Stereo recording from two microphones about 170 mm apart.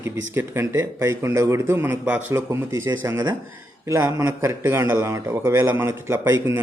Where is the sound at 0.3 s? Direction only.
15° right (ahead or behind).